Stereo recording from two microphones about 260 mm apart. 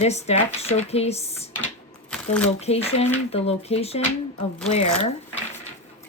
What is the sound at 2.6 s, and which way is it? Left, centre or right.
Speech, left.